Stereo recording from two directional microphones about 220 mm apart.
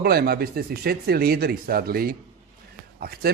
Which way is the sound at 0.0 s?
45° right (ahead or behind).